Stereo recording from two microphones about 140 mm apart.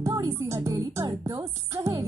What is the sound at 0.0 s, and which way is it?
Music, 20° right (ahead or behind).